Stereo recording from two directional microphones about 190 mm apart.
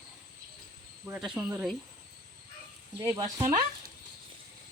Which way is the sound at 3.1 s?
20° right (ahead or behind).